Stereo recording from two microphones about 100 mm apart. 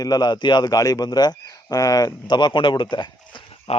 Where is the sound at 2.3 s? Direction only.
50° left (ahead or behind).